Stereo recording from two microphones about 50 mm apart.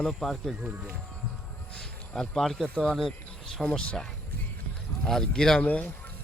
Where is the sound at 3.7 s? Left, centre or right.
Centre.